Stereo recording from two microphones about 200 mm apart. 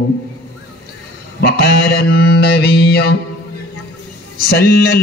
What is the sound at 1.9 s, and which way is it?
Mantra, 50° left (ahead or behind).